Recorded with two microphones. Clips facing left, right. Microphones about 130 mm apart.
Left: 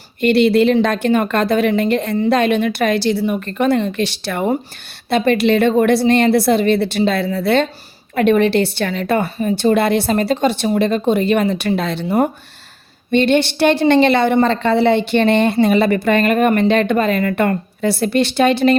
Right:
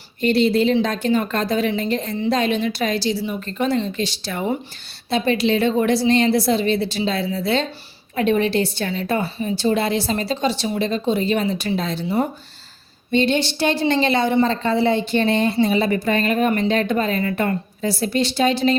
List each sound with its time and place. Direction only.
0.2 s a woman's voice: 65° left (ahead or behind)